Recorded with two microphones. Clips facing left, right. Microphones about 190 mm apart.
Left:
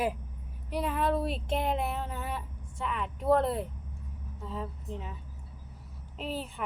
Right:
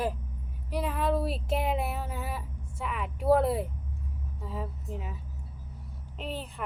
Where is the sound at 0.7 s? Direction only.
Centre (ahead or behind).